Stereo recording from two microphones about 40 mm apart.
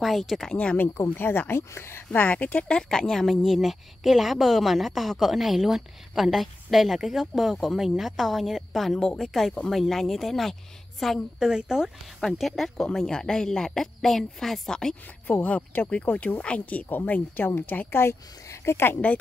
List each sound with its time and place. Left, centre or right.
0.0 s a woman's voice: centre
0.5 s speech: left
0.7 s speech: left
1.5 s speech: left
2.1 s speech: left
2.9 s speech: centre
3.5 s a woman's voice: centre
9.0 s a woman's voice: centre
11.3 s speech: centre
12.4 s speech: centre
15.9 s a woman's voice: left
18.7 s speech: left
19.0 s speech: left